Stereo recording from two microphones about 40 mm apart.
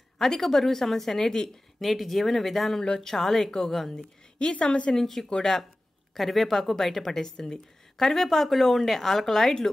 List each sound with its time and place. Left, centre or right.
0.2 s a woman's voice: centre
1.8 s speech: centre
2.8 s a woman's voice: centre
3.9 s a woman's voice: left
4.9 s a woman's voice: centre
6.1 s a woman's voice: centre